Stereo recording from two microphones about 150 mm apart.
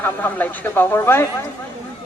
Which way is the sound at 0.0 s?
10° left (ahead or behind).